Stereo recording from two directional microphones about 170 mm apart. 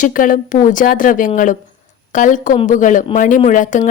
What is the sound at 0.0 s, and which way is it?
Speech, 50° left (ahead or behind).